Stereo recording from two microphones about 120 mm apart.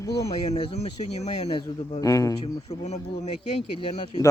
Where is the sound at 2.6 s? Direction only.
70° left (ahead or behind).